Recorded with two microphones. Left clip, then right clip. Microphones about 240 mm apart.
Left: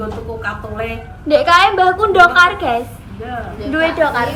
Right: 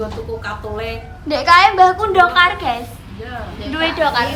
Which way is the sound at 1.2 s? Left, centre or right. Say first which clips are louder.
Left 1 dB; centre.